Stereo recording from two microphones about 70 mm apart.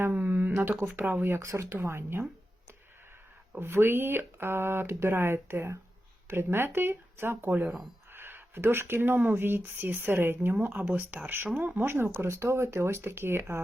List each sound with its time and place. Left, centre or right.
0.0 s speech: right
3.6 s speech: right